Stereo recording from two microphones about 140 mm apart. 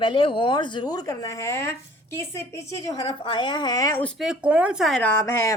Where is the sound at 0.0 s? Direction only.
40° left (ahead or behind); by 1.7 s 20° left (ahead or behind).